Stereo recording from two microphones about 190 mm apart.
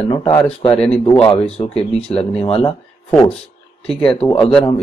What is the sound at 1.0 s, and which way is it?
Speech, 25° left (ahead or behind).